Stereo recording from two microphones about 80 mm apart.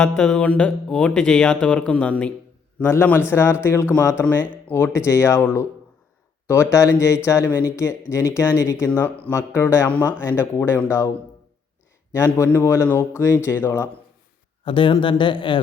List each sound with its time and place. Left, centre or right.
0.0 s speech: centre
2.9 s speech: left
9.0 s speech: left
9.3 s speech: left
12.1 s speech: left
14.6 s speech: left